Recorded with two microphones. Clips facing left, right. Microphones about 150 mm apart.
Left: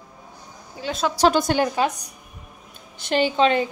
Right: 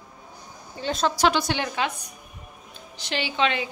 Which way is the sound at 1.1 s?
40° left (ahead or behind).